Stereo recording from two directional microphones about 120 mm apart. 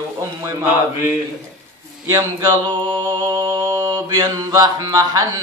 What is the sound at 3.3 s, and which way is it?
Speech, 40° right (ahead or behind).